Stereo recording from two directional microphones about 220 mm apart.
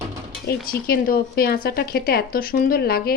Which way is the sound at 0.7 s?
45° left (ahead or behind).